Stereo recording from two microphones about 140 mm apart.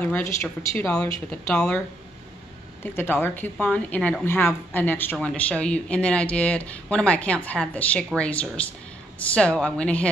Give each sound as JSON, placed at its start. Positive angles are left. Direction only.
{"t": 0.0, "sound": "speech", "side_deg": 15}
{"t": 1.5, "sound": "speech", "side_deg": 5}
{"t": 2.8, "sound": "speech", "side_deg": 15}